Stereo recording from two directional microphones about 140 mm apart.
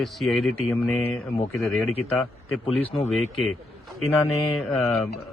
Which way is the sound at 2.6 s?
45° left (ahead or behind).